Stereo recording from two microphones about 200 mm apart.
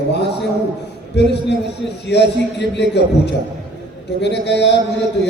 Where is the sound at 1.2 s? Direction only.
60° left (ahead or behind).